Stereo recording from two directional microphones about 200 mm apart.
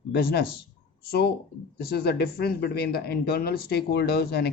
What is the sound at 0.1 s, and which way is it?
Speech, 50° left (ahead or behind).